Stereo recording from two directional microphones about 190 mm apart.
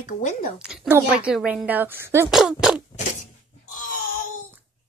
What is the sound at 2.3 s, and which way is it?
Speech, 5° right (ahead or behind).